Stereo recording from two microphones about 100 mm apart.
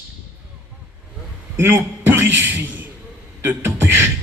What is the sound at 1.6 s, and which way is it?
A man's voice, 20° right (ahead or behind).